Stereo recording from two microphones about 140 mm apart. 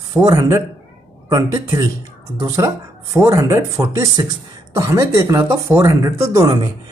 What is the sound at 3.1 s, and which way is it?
Speech, 25° right (ahead or behind).